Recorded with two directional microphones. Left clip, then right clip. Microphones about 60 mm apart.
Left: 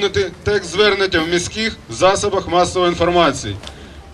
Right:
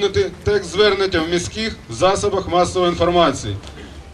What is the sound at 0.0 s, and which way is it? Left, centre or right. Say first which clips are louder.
A man's voice: even; left.